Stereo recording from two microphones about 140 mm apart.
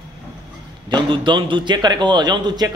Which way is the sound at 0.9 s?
35° right (ahead or behind).